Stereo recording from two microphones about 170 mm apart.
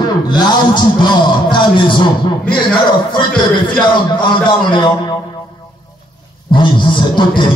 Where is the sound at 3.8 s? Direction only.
25° left (ahead or behind).